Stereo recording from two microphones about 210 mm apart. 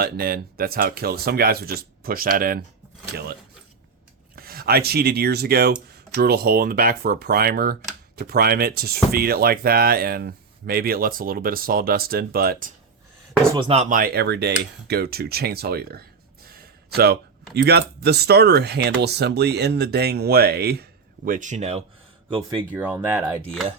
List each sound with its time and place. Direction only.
0.0 s speech: 45° right (ahead or behind)
4.4 s speech: 45° right (ahead or behind)
13.5 s speech: 25° right (ahead or behind)
13.9 s speech: 45° right (ahead or behind)
21.2 s speech: 40° right (ahead or behind); by 23.4 s 10° right (ahead or behind)